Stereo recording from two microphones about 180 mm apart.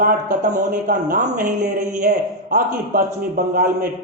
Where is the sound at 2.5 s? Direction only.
50° right (ahead or behind).